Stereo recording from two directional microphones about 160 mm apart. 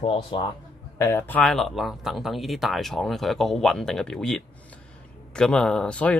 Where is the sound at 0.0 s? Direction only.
35° left (ahead or behind).